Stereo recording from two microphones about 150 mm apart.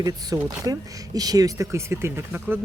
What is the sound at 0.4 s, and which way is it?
A man's voice, 25° right (ahead or behind).